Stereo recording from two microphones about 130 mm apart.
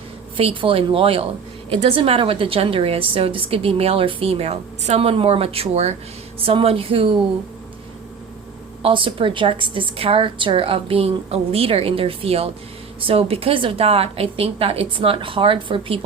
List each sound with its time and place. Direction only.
0.3 s a woman's voice: 45° right (ahead or behind)
8.8 s a woman's voice: 40° right (ahead or behind)